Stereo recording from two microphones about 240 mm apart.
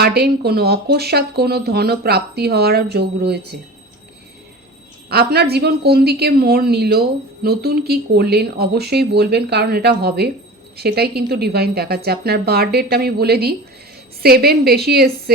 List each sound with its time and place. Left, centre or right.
0.0 s speech: right
5.0 s speech: right